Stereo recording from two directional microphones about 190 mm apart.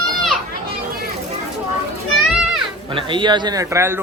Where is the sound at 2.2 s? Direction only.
Centre (ahead or behind).